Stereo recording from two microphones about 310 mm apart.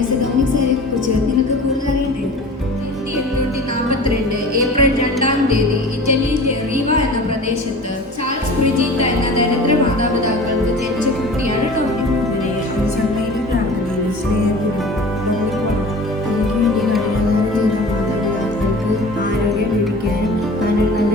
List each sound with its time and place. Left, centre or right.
4.5 s music: right